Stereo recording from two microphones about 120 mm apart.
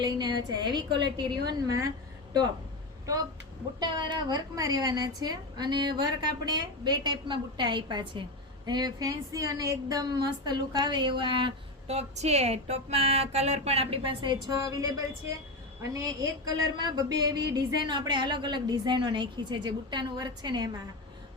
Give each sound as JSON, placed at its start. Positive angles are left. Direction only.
{"t": 0.0, "sound": "speech", "side_deg": -35}
{"t": 3.8, "sound": "speech", "side_deg": -40}
{"t": 11.9, "sound": "speech", "side_deg": -65}
{"t": 14.5, "sound": "a woman's voice", "side_deg": -30}